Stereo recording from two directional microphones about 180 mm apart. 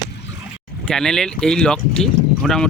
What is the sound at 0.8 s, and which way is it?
Speech, centre (ahead or behind).